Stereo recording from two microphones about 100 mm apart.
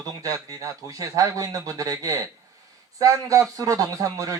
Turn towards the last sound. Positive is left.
turn(degrees=-35)  # may be behind; listen again after turning